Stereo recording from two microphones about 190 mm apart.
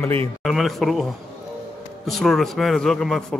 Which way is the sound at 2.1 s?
Centre (ahead or behind).